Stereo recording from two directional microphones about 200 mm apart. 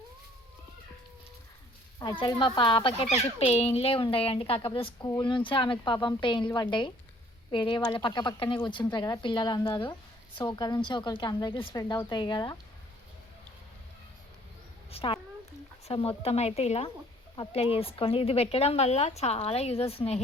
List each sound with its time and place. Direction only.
2.0 s a woman's voice: 20° left (ahead or behind)
14.8 s a sound: 30° left (ahead or behind)
15.9 s a woman's voice: 30° left (ahead or behind)